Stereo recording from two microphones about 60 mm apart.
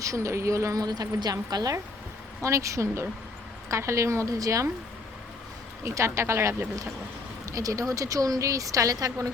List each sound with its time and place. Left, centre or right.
0.0 s a woman's voice: right
2.4 s a woman's voice: right
5.8 s speech: right
7.5 s speech: right